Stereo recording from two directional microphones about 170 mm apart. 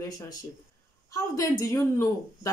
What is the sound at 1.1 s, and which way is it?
Speech, 20° left (ahead or behind).